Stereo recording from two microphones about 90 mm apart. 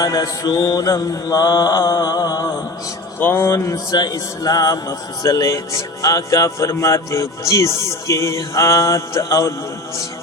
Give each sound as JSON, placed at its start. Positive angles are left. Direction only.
{"t": 0.0, "sound": "mantra", "side_deg": 45}
{"t": 3.2, "sound": "speech", "side_deg": 25}
{"t": 3.5, "sound": "a man's voice", "side_deg": 45}